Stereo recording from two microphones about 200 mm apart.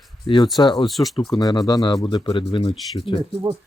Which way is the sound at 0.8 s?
Centre (ahead or behind).